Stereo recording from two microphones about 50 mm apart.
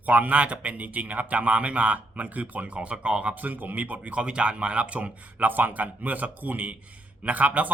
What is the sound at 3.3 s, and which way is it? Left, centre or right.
Speech, right.